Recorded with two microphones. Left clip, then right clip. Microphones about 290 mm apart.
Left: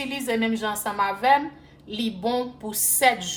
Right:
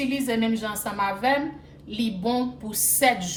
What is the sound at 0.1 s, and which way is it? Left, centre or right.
A woman's voice, left.